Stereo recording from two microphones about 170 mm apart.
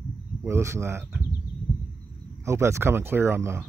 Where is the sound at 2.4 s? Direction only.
15° right (ahead or behind).